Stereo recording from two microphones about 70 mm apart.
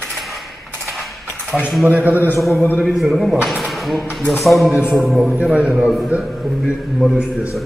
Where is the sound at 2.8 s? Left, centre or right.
Centre.